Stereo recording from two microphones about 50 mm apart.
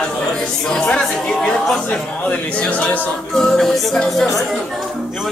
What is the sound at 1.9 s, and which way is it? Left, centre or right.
Speech, left.